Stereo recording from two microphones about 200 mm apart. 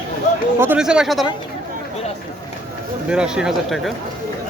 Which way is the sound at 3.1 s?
5° right (ahead or behind).